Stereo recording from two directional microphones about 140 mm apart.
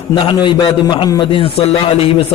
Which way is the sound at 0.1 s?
35° left (ahead or behind).